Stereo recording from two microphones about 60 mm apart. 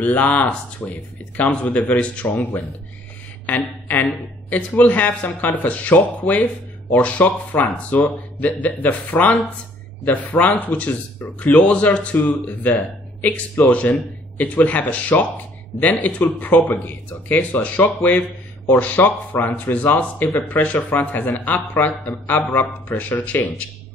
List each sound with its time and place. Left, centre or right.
0.0 s a woman's voice: left